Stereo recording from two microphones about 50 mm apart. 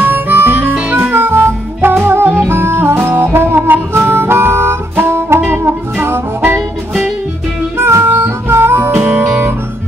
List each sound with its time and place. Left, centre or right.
0.0 s harmonica: right
0.4 s harmonica: right
1.1 s music: right
7.8 s music: right
9.0 s music: right